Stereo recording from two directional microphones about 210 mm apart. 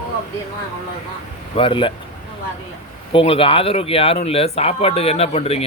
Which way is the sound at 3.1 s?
25° left (ahead or behind).